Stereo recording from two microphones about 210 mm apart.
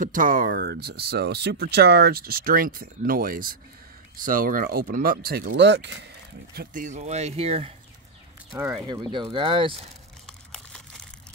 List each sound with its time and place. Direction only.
0.0 s speech: 40° right (ahead or behind)
6.5 s speech: 45° right (ahead or behind)
8.5 s speech: 10° right (ahead or behind)
8.8 s speech: 20° right (ahead or behind)
10.2 s a sound: 5° left (ahead or behind)